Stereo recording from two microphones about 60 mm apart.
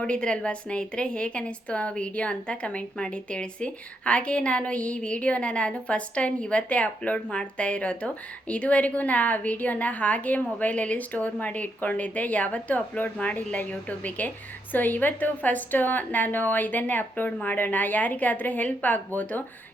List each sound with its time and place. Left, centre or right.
0.0 s a woman's voice: centre